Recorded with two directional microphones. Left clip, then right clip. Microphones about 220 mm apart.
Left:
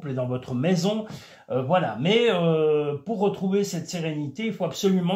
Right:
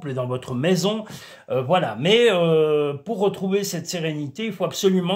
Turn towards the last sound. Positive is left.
turn(degrees=-45)  # may be behind; listen again after turning